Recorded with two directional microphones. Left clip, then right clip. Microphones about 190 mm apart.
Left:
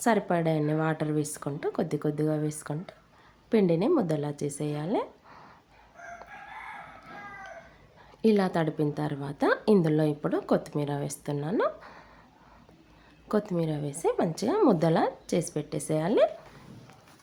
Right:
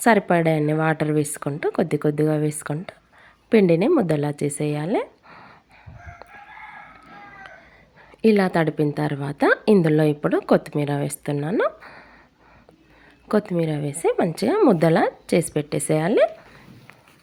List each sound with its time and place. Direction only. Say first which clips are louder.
0.0 s a woman's voice: right 8 dB; 25° right (ahead or behind)
8.2 s a woman's voice: right 7 dB; 20° right (ahead or behind)
13.2 s a woman's voice: right 7 dB; 25° right (ahead or behind)